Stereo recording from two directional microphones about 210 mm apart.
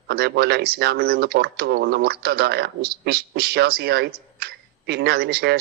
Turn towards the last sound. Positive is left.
turn(degrees=-50)  # may be behind; listen again after turning